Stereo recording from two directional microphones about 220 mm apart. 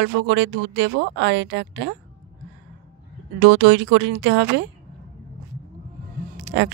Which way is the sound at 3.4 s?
50° right (ahead or behind).